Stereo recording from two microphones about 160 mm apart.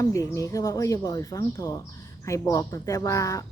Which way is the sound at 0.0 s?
20° left (ahead or behind).